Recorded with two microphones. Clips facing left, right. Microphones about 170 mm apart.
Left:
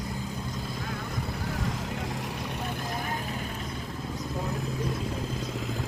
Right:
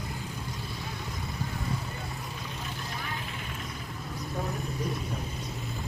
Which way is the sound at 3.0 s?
45° left (ahead or behind).